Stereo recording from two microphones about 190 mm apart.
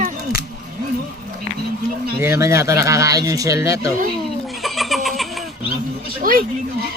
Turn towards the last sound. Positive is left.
turn(degrees=-45)  # may be behind; listen again after turning